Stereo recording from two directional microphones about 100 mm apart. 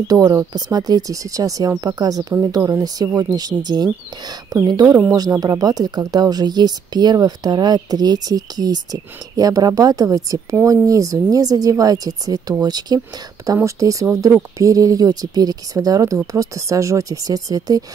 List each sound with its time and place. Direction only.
0.1 s speech: 35° right (ahead or behind)